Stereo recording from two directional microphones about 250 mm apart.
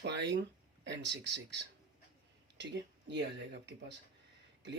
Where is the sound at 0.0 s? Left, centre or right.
Right.